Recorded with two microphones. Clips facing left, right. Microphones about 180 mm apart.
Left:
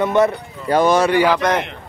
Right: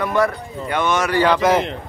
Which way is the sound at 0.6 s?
35° left (ahead or behind).